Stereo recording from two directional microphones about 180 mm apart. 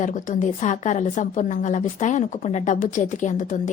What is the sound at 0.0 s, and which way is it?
A woman's voice, 45° left (ahead or behind).